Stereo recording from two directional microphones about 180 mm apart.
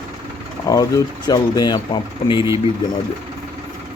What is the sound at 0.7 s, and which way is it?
Speech, 20° left (ahead or behind).